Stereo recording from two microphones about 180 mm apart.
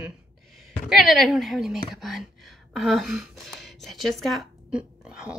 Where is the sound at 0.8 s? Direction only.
Centre (ahead or behind).